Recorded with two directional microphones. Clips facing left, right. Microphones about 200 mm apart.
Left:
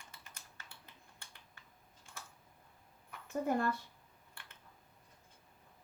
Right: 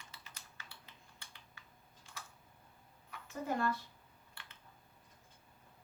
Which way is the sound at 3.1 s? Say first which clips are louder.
Left 4 dB; 50° left (ahead or behind).